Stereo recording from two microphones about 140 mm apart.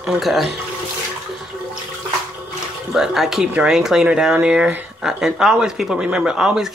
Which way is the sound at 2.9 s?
5° right (ahead or behind).